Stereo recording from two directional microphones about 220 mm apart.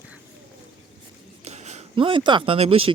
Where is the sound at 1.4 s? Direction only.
30° right (ahead or behind).